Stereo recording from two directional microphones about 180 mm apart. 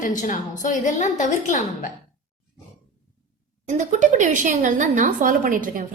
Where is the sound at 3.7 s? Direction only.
45° right (ahead or behind).